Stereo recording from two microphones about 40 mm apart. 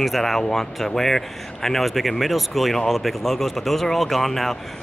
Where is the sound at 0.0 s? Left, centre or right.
Centre.